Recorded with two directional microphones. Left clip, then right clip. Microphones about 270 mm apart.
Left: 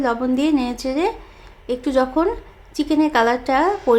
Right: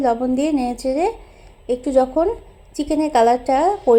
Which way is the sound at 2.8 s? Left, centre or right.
Left.